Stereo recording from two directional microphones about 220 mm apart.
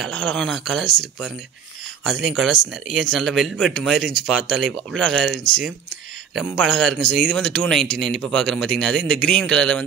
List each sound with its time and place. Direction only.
0.0 s speech: 5° left (ahead or behind)
2.0 s speech: centre (ahead or behind)